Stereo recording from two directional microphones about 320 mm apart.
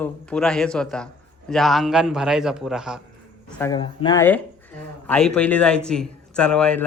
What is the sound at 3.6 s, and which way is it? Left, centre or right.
Speech, centre.